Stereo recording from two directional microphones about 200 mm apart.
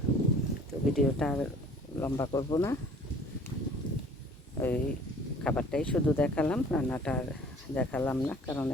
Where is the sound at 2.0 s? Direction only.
20° left (ahead or behind).